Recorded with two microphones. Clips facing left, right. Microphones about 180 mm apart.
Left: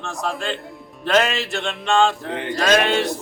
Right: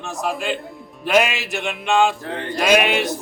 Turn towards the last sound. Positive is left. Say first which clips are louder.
# right 1 dB
turn(degrees=-10)  # may be behind; listen again after turning